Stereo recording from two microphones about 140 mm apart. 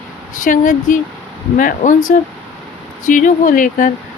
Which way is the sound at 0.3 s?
70° left (ahead or behind).